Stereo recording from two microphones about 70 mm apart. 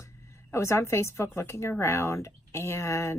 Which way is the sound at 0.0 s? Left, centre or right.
Left.